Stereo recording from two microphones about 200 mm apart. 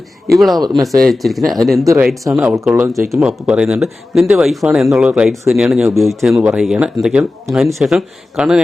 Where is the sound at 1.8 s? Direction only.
15° right (ahead or behind).